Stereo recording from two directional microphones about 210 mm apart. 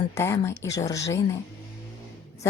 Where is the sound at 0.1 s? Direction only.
10° left (ahead or behind).